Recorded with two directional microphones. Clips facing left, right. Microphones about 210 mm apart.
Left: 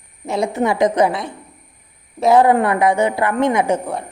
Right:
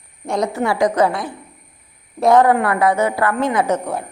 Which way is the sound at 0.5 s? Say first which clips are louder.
Left 2 dB; 20° left (ahead or behind).